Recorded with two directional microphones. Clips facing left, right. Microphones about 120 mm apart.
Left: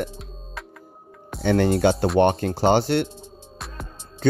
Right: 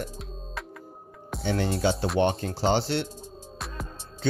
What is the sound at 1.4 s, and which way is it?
Speech, 60° left (ahead or behind).